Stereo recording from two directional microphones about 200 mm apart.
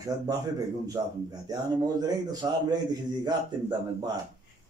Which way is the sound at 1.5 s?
20° right (ahead or behind).